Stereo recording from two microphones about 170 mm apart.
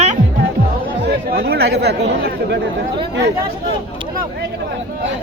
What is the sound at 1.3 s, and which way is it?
Speech, 65° right (ahead or behind).